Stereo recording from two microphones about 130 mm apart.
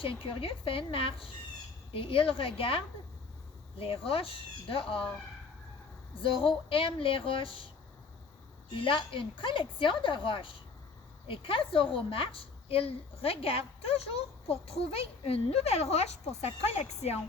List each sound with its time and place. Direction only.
0.0 s a woman's voice: 45° left (ahead or behind)
6.2 s a woman's voice: 45° left (ahead or behind)
8.7 s a woman's voice: 40° left (ahead or behind)